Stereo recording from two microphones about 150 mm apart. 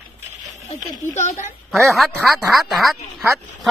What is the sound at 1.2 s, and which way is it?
Speech, 55° left (ahead or behind).